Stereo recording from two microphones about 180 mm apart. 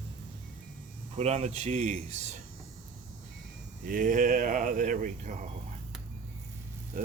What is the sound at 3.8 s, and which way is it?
Speech, 50° right (ahead or behind).